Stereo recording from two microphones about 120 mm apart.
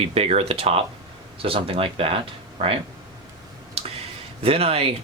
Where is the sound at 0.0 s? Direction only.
55° right (ahead or behind).